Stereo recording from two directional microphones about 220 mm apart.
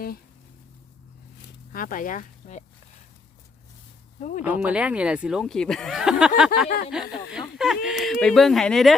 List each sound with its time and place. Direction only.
1.7 s speech: 40° left (ahead or behind)
4.2 s speech: 35° left (ahead or behind)
4.6 s speech: 5° right (ahead or behind)